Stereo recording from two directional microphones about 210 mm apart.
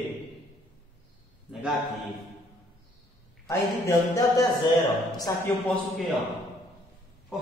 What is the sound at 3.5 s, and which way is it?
A man's voice, 15° left (ahead or behind).